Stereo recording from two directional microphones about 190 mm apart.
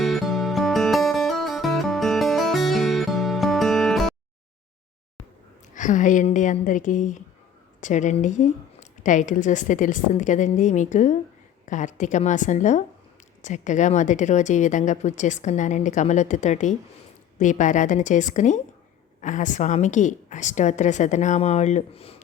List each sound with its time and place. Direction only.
0.0 s music: centre (ahead or behind)
5.7 s speech: 40° left (ahead or behind)